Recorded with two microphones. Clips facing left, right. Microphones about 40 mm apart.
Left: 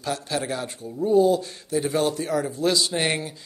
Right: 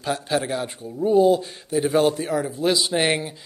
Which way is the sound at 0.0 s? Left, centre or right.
Centre.